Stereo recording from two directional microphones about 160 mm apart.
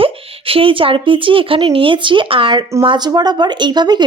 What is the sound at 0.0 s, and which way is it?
Speech, 35° right (ahead or behind).